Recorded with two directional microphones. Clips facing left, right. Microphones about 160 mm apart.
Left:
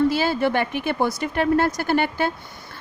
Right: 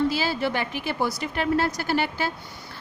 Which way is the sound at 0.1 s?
50° left (ahead or behind).